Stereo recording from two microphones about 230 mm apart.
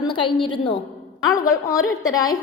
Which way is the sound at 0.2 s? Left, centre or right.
Left.